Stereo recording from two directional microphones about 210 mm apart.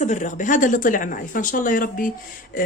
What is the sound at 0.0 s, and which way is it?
Speech, 35° left (ahead or behind).